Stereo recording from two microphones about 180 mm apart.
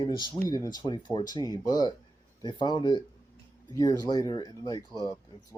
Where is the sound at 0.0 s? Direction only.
30° left (ahead or behind).